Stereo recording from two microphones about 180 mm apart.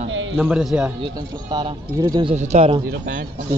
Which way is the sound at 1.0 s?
25° right (ahead or behind).